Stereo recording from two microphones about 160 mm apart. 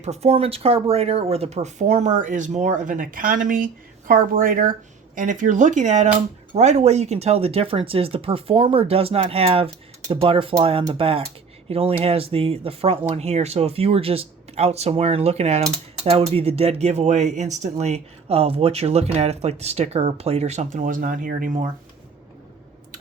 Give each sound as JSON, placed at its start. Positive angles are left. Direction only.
{"t": 0.0, "sound": "speech", "side_deg": -40}